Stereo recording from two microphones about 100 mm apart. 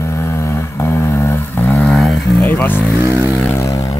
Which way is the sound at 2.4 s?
20° left (ahead or behind).